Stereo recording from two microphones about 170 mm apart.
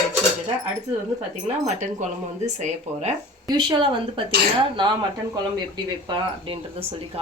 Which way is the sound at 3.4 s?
25° right (ahead or behind).